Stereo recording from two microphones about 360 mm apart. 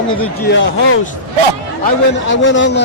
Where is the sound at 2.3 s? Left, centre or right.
Left.